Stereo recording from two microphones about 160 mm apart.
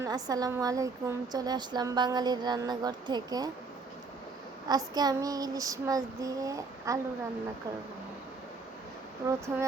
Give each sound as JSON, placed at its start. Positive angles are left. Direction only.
{"t": 0.0, "sound": "a woman's voice", "side_deg": -25}
{"t": 4.9, "sound": "a woman's voice", "side_deg": -25}
{"t": 9.5, "sound": "a sound", "side_deg": -15}